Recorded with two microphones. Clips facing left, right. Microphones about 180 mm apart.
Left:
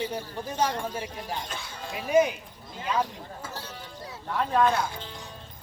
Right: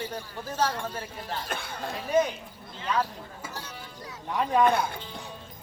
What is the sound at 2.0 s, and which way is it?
Speech, 10° left (ahead or behind).